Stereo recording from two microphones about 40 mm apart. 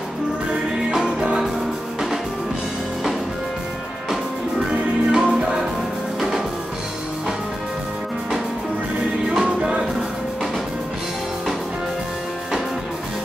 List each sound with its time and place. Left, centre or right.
0.5 s music: centre
4.6 s music: centre
9.3 s music: centre